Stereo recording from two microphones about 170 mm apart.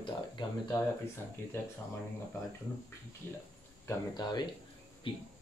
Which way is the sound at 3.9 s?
25° left (ahead or behind).